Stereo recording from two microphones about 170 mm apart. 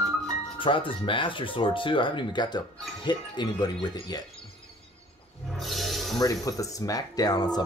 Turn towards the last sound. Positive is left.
turn(degrees=25)  # may be behind; listen again after turning